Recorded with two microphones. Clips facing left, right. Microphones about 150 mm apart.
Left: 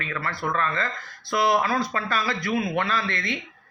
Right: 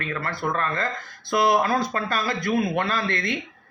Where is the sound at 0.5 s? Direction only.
45° right (ahead or behind).